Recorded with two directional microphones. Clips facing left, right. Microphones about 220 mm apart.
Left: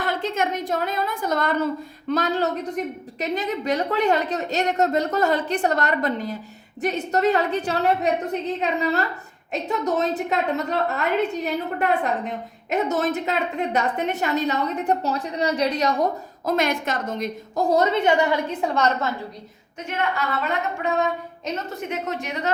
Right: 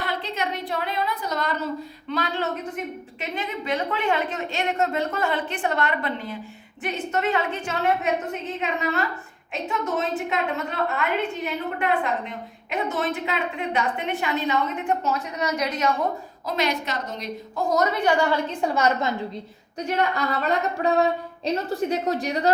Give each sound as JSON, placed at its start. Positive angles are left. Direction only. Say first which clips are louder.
{"t": 0.0, "sound": "a woman's voice", "louder": "left 4 dB", "side_deg": 45}
{"t": 11.4, "sound": "a woman's voice", "louder": "left 2 dB", "side_deg": 45}
{"t": 16.5, "sound": "a woman's voice", "louder": "left 3 dB", "side_deg": 50}
{"t": 17.7, "sound": "a woman's voice", "louder": "left 2 dB", "side_deg": 25}
{"t": 18.6, "sound": "a woman's voice", "louder": "even", "side_deg": -5}
{"t": 19.9, "sound": "a woman's voice", "louder": "right 1 dB", "side_deg": -40}